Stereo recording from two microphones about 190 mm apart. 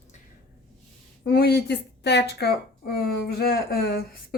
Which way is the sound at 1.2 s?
55° left (ahead or behind).